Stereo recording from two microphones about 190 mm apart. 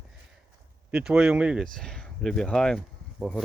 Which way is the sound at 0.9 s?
5° right (ahead or behind).